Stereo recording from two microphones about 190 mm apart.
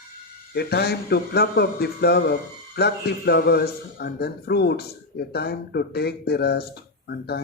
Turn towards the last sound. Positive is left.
turn(degrees=60)  # may be behind; listen again after turning